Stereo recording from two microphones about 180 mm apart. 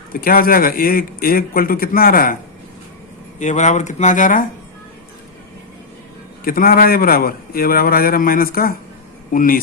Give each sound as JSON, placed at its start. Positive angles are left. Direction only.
{"t": 0.1, "sound": "speech", "side_deg": 55}
{"t": 3.3, "sound": "speech", "side_deg": 40}
{"t": 6.4, "sound": "a man's voice", "side_deg": 55}